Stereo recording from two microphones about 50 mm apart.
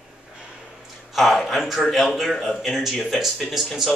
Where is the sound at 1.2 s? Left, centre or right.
Centre.